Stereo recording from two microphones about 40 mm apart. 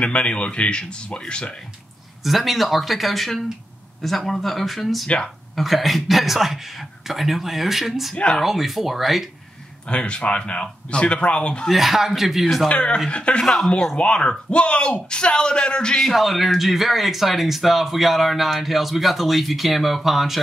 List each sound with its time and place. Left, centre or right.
0.0 s speech: left
2.2 s speech: centre
5.0 s speech: left
5.6 s speech: centre
9.8 s speech: left
11.7 s speech: centre
12.6 s speech: left
16.0 s speech: centre